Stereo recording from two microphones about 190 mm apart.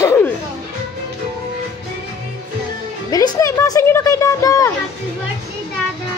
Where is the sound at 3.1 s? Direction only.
15° left (ahead or behind).